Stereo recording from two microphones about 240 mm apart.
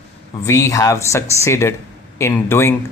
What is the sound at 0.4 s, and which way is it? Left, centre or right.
Speech, centre.